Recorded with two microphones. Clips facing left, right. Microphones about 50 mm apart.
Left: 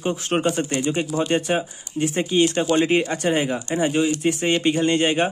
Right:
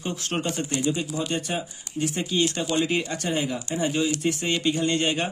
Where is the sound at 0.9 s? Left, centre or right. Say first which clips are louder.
Left 6 dB; left.